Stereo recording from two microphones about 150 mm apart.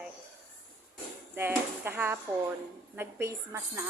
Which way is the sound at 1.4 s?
15° right (ahead or behind).